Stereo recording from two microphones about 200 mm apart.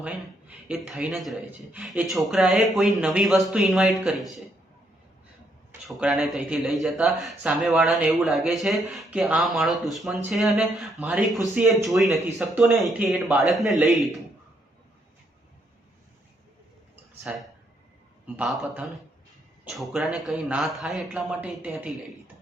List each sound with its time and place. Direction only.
0.0 s speech: 5° right (ahead or behind)
5.8 s speech: centre (ahead or behind)
18.3 s speech: centre (ahead or behind)